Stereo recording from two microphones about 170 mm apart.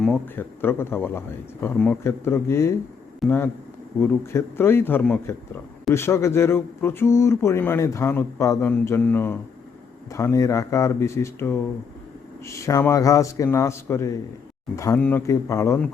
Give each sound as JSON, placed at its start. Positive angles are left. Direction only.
{"t": 0.0, "sound": "speech", "side_deg": 0}
{"t": 0.6, "sound": "speech", "side_deg": 15}